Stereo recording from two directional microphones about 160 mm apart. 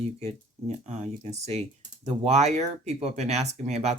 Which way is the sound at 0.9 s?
45° right (ahead or behind).